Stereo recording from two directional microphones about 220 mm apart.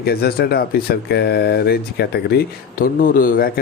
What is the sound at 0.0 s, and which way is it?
Speech, 45° left (ahead or behind).